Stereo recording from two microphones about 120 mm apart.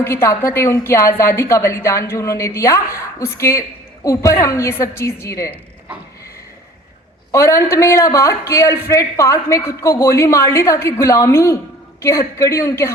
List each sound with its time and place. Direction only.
0.0 s a man's voice: 20° left (ahead or behind)
7.3 s a man's voice: 25° left (ahead or behind)